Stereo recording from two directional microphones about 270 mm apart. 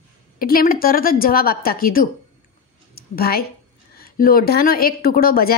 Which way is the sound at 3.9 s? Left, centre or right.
Left.